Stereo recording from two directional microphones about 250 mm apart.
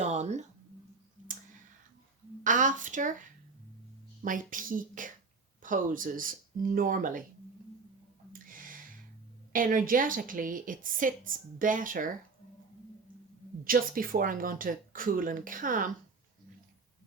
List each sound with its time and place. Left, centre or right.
0.0 s a sound: right
2.4 s speech: right
8.3 s music: right
9.5 s speech: right
13.7 s speech: right